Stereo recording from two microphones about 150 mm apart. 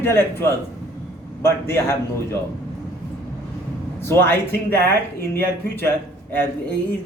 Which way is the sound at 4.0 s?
15° left (ahead or behind).